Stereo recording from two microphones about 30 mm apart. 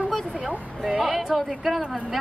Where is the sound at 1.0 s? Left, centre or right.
Centre.